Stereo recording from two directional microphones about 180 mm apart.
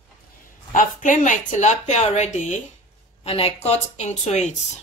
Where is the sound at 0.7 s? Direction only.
45° left (ahead or behind).